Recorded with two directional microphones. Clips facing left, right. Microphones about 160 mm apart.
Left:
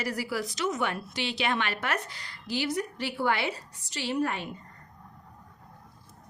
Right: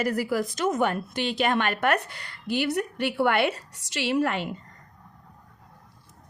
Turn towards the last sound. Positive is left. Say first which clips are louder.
# right 4 dB
turn(degrees=-80)